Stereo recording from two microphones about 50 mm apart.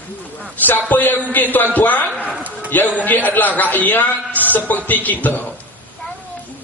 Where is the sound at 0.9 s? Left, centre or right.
Left.